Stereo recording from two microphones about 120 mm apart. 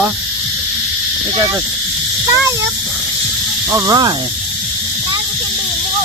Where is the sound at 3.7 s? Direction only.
25° right (ahead or behind).